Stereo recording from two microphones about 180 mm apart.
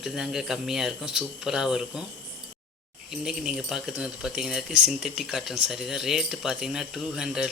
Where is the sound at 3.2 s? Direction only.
5° right (ahead or behind).